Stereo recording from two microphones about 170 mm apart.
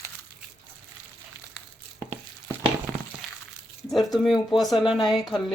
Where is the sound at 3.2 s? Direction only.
Centre (ahead or behind).